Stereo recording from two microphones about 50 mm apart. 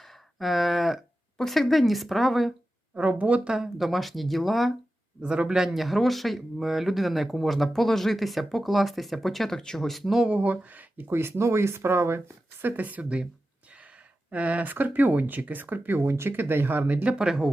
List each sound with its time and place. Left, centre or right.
0.0 s a sound: centre
1.4 s speech: centre
2.9 s speech: right
3.5 s speech: centre
3.8 s speech: centre
5.2 s speech: centre
10.2 s speech: right
12.6 s speech: right
14.3 s speech: right
16.0 s speech: right
17.2 s speech: centre